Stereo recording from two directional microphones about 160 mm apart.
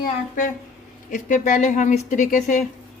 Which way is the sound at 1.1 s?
55° left (ahead or behind).